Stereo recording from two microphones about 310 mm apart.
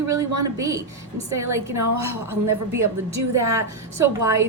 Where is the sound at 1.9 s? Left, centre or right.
Right.